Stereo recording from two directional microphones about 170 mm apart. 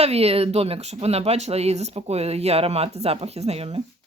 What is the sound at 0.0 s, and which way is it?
A woman's voice, 35° right (ahead or behind).